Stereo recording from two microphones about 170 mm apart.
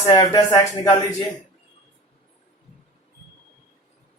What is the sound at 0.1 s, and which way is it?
Speech, 20° left (ahead or behind).